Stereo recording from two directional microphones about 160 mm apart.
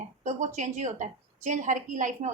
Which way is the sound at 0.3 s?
50° right (ahead or behind).